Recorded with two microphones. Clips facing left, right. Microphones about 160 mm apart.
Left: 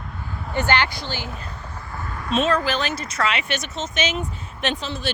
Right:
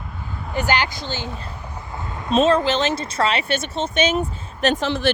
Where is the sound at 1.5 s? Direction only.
15° right (ahead or behind).